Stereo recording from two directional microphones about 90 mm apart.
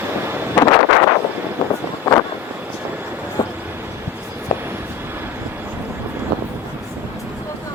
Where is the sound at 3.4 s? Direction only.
45° left (ahead or behind).